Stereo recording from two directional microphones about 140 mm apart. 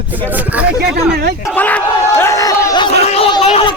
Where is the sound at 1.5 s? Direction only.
10° left (ahead or behind).